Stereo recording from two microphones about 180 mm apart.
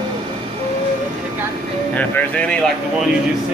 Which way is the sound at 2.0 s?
10° left (ahead or behind).